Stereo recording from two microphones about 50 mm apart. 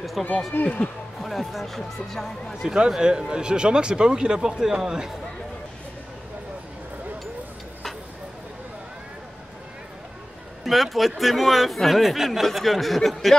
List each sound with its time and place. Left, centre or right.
0.2 s a man's voice: centre
0.5 s speech: left
1.2 s a man's voice: centre
2.6 s speech: centre
10.6 s a man's voice: centre